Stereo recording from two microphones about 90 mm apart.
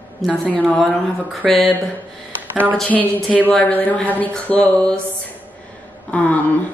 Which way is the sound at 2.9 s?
20° left (ahead or behind).